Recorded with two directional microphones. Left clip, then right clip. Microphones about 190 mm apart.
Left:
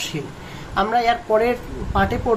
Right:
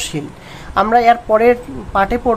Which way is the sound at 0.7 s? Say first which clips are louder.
Right 7 dB; 45° right (ahead or behind).